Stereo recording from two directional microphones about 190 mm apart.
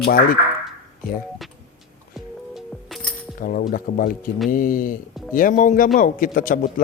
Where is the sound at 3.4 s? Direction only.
50° left (ahead or behind).